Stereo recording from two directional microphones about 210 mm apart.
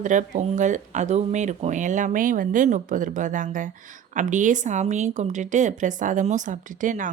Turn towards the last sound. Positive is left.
turn(degrees=-40)  # may be behind; listen again after turning